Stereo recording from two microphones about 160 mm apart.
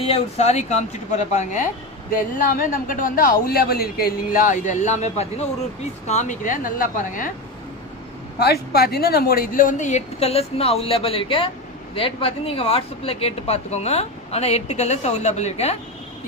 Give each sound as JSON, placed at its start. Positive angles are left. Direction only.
{"t": 0.0, "sound": "speech", "side_deg": 40}
{"t": 2.4, "sound": "a man's voice", "side_deg": 60}
{"t": 8.4, "sound": "speech", "side_deg": 80}